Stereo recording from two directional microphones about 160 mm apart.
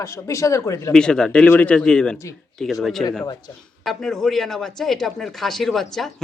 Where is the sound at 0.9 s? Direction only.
5° left (ahead or behind).